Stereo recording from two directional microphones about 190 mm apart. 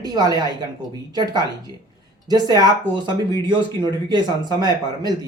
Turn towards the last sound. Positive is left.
turn(degrees=-20)  # may be behind; listen again after turning